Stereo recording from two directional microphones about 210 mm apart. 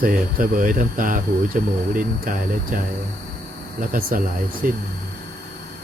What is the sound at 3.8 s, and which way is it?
Speech, 40° right (ahead or behind).